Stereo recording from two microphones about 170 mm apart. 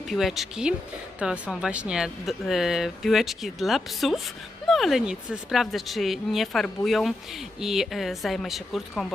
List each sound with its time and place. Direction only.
0.1 s speech: centre (ahead or behind)